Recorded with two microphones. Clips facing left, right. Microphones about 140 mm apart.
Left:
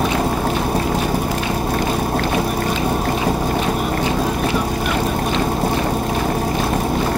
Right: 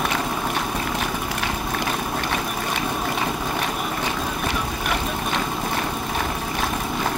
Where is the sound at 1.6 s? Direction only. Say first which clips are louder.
Left 6 dB; 40° left (ahead or behind).